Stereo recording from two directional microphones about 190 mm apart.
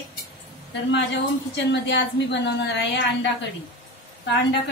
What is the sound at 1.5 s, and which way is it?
A woman's voice, 65° left (ahead or behind).